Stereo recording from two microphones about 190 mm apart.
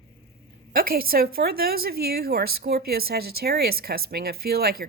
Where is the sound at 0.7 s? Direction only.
50° right (ahead or behind).